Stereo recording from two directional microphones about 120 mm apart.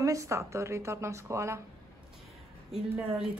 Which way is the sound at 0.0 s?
25° right (ahead or behind).